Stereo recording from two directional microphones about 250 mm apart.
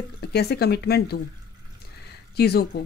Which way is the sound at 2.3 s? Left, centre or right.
Left.